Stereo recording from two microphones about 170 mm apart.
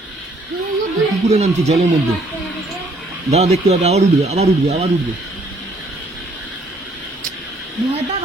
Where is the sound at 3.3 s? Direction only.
40° right (ahead or behind).